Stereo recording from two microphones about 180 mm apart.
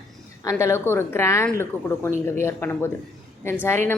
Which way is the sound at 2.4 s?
15° left (ahead or behind).